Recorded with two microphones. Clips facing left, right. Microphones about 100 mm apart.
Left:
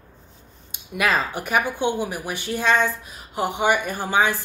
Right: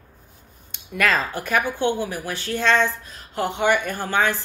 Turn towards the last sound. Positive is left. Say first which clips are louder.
# left 1 dB
turn(degrees=15)  # may be behind; listen again after turning